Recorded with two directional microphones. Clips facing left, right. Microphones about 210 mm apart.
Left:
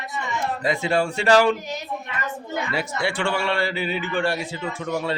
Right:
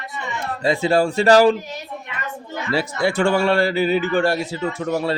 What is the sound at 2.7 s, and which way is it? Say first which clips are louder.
A man's voice: right 8 dB; 35° right (ahead or behind).